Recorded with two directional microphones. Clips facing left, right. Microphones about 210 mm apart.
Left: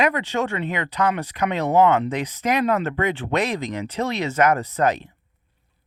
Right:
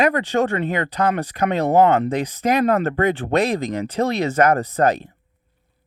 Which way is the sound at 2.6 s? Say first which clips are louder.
Right 4 dB; 50° right (ahead or behind).